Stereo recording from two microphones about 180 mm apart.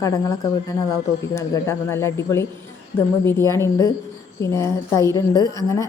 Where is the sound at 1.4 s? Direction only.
15° left (ahead or behind).